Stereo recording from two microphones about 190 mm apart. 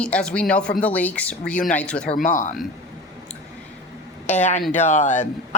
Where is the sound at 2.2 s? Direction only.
45° left (ahead or behind).